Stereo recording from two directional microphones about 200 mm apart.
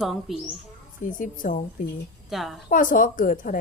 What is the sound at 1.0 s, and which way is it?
Speech, 40° left (ahead or behind).